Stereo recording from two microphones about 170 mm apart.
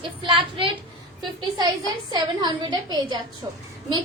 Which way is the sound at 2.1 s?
25° right (ahead or behind).